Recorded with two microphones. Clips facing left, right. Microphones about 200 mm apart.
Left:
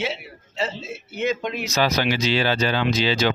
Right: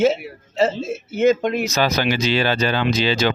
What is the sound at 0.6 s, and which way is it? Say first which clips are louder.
Speech: right 9 dB; 45° right (ahead or behind).